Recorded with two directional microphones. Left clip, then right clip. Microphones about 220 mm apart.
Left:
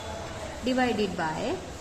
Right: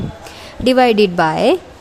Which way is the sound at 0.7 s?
50° right (ahead or behind).